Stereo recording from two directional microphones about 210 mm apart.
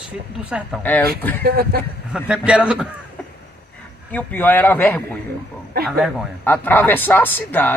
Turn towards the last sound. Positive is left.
turn(degrees=10)  # may be behind; listen again after turning